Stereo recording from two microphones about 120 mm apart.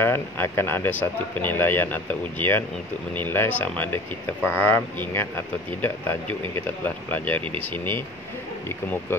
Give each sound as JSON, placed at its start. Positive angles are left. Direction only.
{"t": 0.0, "sound": "speech", "side_deg": 20}